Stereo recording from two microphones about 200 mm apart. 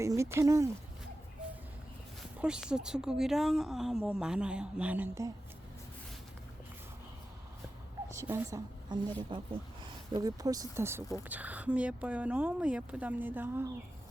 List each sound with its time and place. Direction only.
0.0 s speech: 15° right (ahead or behind)
2.4 s a woman's voice: 5° right (ahead or behind)
8.1 s a woman's voice: 15° right (ahead or behind)